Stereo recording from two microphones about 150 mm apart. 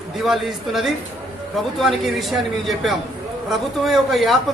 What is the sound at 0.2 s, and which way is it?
A man's voice, centre (ahead or behind).